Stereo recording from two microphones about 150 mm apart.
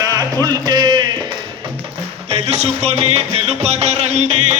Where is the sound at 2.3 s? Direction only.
45° right (ahead or behind).